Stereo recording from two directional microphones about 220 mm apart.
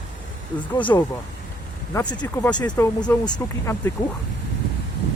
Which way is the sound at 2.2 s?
20° left (ahead or behind).